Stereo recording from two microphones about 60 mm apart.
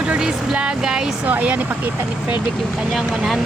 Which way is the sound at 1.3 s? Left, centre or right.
Right.